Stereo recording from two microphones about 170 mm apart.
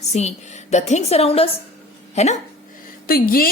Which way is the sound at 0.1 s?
40° left (ahead or behind).